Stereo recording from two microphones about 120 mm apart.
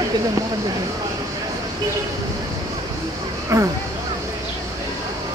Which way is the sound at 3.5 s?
25° right (ahead or behind).